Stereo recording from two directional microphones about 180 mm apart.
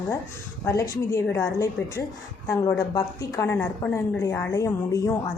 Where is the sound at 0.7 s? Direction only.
15° left (ahead or behind).